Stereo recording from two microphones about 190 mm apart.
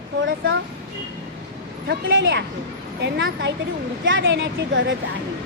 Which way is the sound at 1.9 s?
75° right (ahead or behind).